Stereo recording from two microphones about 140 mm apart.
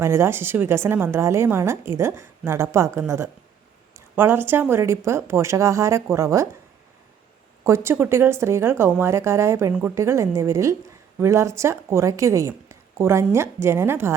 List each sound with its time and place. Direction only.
0.0 s a woman's voice: 20° right (ahead or behind)
7.6 s a woman's voice: 20° right (ahead or behind)